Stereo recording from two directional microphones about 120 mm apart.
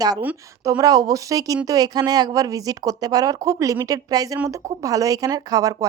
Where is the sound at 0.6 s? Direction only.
30° right (ahead or behind).